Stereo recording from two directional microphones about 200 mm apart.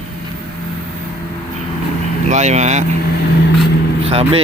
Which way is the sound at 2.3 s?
35° right (ahead or behind).